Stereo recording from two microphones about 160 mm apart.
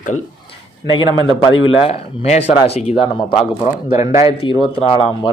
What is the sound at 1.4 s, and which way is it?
Speech, 35° left (ahead or behind).